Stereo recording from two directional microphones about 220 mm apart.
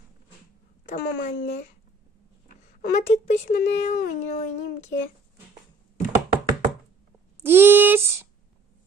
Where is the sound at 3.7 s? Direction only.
35° left (ahead or behind).